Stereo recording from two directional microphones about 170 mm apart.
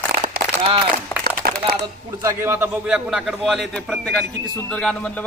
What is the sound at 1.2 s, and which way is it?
Run, 65° right (ahead or behind).